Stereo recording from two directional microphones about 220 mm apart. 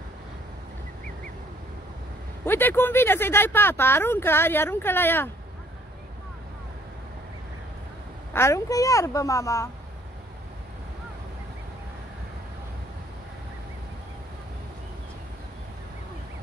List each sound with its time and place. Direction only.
2.4 s speech: 10° left (ahead or behind)
8.3 s speech: 10° left (ahead or behind)